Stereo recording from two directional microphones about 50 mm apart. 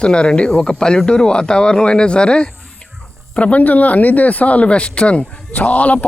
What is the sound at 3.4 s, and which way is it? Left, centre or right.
Speech, left.